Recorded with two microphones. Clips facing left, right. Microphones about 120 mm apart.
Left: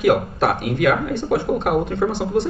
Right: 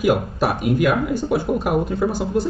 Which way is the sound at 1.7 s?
60° left (ahead or behind).